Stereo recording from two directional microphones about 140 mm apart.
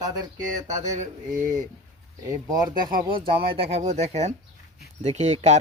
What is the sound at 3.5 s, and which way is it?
Speech, 50° right (ahead or behind).